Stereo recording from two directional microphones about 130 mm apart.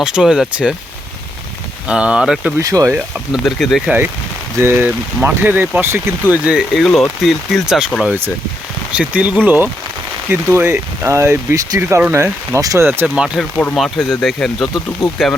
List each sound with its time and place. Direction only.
0.0 s speech: 5° right (ahead or behind)
1.9 s speech: 10° right (ahead or behind)
2.6 s speech: 25° right (ahead or behind)
2.9 s speech: centre (ahead or behind)
4.5 s speech: 20° right (ahead or behind); by 8.1 s 5° left (ahead or behind)
8.9 s speech: 10° right (ahead or behind)
13.1 s speech: 5° right (ahead or behind)